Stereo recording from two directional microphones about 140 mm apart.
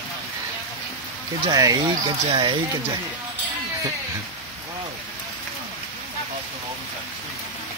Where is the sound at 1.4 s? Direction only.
25° right (ahead or behind).